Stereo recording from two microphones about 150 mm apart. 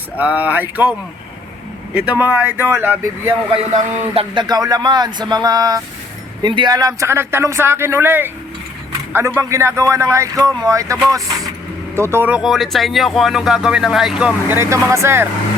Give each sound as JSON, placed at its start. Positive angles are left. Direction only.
{"t": 0.2, "sound": "speech", "side_deg": -10}
{"t": 4.1, "sound": "speech", "side_deg": -35}
{"t": 11.9, "sound": "speech", "side_deg": -15}